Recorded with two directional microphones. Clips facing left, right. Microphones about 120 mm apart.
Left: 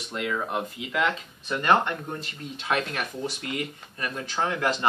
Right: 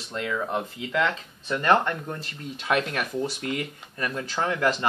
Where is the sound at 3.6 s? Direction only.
25° left (ahead or behind).